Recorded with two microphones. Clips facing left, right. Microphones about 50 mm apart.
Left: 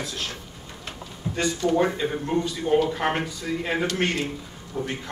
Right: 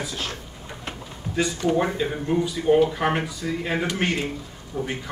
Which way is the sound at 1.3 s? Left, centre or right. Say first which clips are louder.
Right 3 dB; left.